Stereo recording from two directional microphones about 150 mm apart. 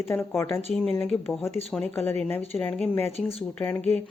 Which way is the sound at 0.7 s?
5° left (ahead or behind).